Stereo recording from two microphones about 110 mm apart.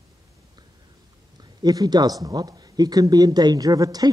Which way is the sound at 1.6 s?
40° right (ahead or behind).